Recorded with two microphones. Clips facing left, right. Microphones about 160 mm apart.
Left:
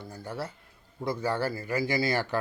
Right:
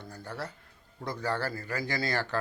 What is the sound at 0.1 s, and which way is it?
Speech, 10° left (ahead or behind).